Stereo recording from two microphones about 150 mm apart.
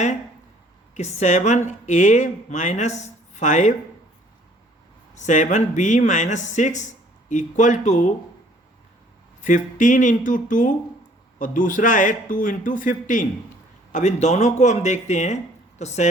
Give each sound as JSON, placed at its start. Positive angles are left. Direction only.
{"t": 0.9, "sound": "a woman's voice", "side_deg": 50}
{"t": 5.1, "sound": "a woman's voice", "side_deg": 55}
{"t": 9.4, "sound": "a woman's voice", "side_deg": 60}